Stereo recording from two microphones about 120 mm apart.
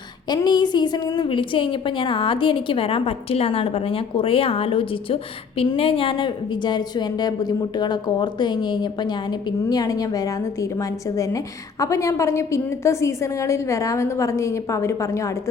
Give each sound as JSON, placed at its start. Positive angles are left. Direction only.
{"t": 0.3, "sound": "a woman's voice", "side_deg": 35}